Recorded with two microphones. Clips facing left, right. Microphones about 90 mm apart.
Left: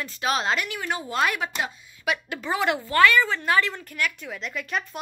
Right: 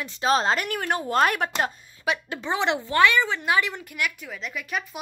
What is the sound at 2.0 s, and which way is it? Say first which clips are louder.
Speech: even; 30° right (ahead or behind).